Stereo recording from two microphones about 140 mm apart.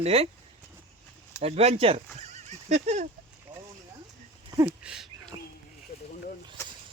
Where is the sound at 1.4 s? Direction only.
45° right (ahead or behind).